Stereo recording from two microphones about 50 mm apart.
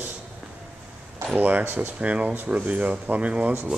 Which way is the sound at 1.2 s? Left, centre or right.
Right.